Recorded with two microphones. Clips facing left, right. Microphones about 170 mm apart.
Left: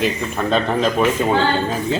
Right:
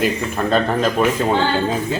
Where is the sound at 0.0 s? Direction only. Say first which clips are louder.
Right 1 dB; centre (ahead or behind).